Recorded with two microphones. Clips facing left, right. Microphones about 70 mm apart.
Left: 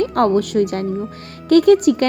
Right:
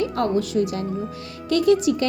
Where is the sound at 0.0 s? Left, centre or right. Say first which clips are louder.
Left 6 dB; left.